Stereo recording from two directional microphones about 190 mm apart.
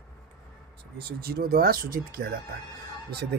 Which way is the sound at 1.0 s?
55° right (ahead or behind).